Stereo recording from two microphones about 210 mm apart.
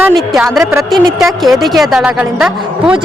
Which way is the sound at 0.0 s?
5° right (ahead or behind).